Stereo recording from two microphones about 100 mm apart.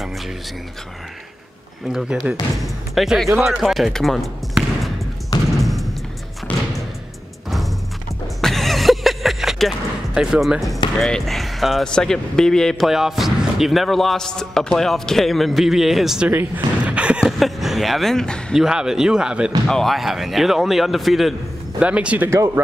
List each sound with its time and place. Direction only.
1.9 s speech: 5° right (ahead or behind)
3.5 s basketball bounce: centre (ahead or behind)
5.6 s a sound: centre (ahead or behind)
6.5 s music: 15° left (ahead or behind)
8.4 s a sound: centre (ahead or behind)
11.0 s speech: 5° left (ahead or behind)
16.3 s a sound: 15° right (ahead or behind)
17.4 s speech: centre (ahead or behind)
18.5 s speech: 5° right (ahead or behind)
21.7 s speech: 10° right (ahead or behind)